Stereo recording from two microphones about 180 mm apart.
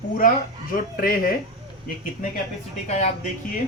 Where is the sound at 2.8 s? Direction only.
40° left (ahead or behind).